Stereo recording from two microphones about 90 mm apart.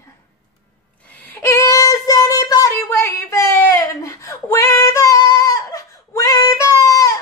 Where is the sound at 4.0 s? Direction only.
35° left (ahead or behind).